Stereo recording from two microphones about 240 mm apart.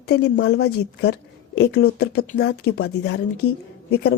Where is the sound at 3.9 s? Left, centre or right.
Left.